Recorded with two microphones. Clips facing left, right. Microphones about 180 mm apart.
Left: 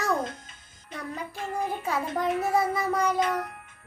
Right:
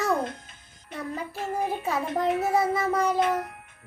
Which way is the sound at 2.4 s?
Centre (ahead or behind).